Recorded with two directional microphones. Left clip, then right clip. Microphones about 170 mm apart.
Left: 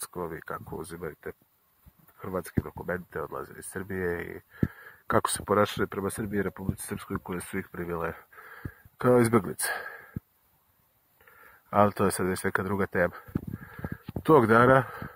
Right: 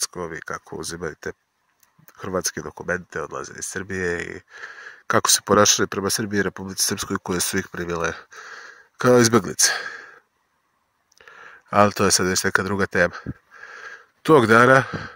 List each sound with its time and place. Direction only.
0.0 s speech: 15° right (ahead or behind); by 2.7 s 35° right (ahead or behind)
2.7 s speech: 20° right (ahead or behind)
5.4 s speech: 35° right (ahead or behind)
6.9 s speech: 50° right (ahead or behind); by 10.0 s 20° right (ahead or behind)
11.7 s speech: 25° right (ahead or behind)